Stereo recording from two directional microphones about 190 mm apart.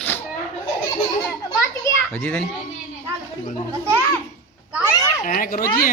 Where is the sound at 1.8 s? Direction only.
10° left (ahead or behind).